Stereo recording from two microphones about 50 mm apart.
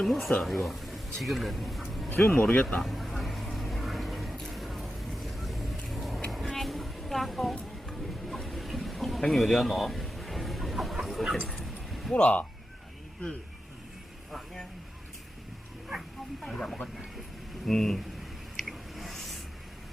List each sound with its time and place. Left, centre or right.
0.0 s a man's voice: centre
2.4 s speech: left
2.8 s a sound: centre
4.5 s vehicle: centre
6.6 s a sound: centre
9.3 s chicken: centre
11.0 s dog: centre
11.4 s bow-wow: centre
12.1 s speech: left
14.3 s vehicle: centre
15.9 s speech: centre
18.6 s a sound: centre